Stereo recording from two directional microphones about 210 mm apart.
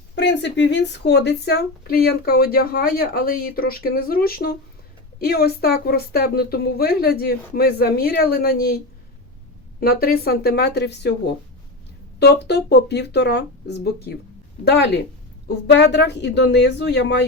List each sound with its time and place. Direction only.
0.2 s speech: 55° left (ahead or behind)
9.8 s speech: 45° left (ahead or behind)
12.2 s a woman's voice: 50° left (ahead or behind)